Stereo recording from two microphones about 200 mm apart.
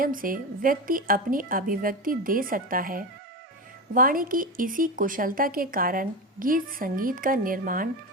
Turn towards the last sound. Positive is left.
turn(degrees=-45)  # may be behind; listen again after turning